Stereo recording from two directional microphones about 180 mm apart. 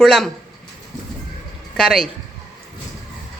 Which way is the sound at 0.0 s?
Centre (ahead or behind).